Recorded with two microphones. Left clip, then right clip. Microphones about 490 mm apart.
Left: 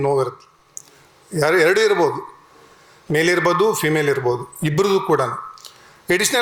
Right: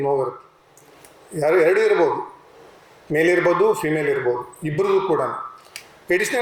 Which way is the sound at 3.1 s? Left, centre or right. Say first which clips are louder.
Even; left.